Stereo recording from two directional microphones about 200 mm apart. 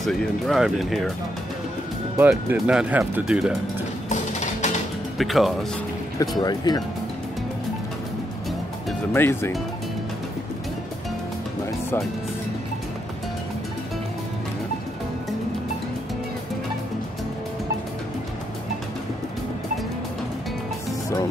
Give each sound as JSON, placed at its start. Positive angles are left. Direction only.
{"t": 0.0, "sound": "speech", "side_deg": 0}
{"t": 2.1, "sound": "speech", "side_deg": -5}
{"t": 4.1, "sound": "music", "side_deg": 35}
{"t": 5.1, "sound": "speech", "side_deg": 0}
{"t": 6.4, "sound": "speech", "side_deg": 20}
{"t": 9.1, "sound": "speech", "side_deg": 10}